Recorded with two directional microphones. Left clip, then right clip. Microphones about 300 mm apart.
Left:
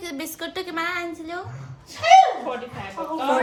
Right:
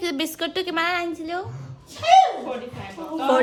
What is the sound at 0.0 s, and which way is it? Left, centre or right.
A woman's voice, centre.